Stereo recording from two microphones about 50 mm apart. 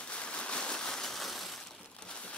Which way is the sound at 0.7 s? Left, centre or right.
Centre.